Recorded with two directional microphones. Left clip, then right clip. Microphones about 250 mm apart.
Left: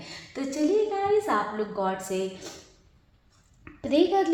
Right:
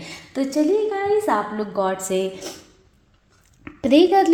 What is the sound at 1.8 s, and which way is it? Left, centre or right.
Speech, right.